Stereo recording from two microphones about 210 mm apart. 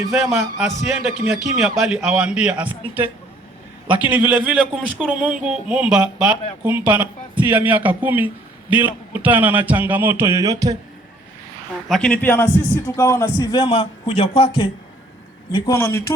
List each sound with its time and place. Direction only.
0.1 s a man's voice: centre (ahead or behind)
11.9 s a man's voice: 5° left (ahead or behind); by 14.5 s 30° left (ahead or behind)
15.6 s a man's voice: 15° left (ahead or behind)